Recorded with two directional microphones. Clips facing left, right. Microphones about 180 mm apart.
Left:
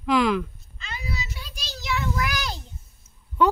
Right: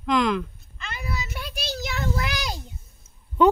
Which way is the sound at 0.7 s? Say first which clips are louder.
Right 2 dB; 55° right (ahead or behind).